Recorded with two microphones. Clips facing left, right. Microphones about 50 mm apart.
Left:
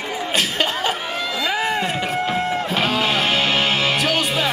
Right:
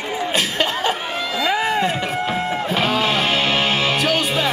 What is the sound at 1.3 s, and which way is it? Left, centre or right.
Run, right.